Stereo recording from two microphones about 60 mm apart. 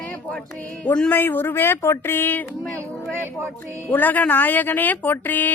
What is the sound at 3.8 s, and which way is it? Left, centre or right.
Speech, left.